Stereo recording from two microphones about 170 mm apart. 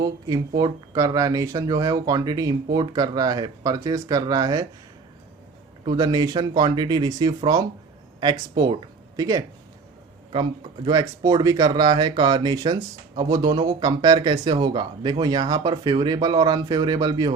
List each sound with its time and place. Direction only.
0.0 s speech: 25° right (ahead or behind)
5.8 s speech: 25° right (ahead or behind)
10.8 s speech: 25° right (ahead or behind)